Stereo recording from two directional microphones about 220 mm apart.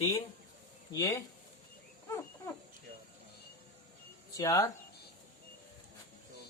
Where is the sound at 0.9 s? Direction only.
15° left (ahead or behind).